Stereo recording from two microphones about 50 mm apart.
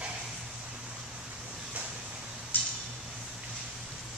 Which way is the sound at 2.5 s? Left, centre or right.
Left.